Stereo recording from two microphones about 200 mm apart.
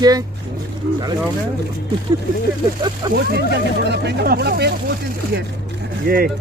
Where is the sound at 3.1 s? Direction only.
55° right (ahead or behind).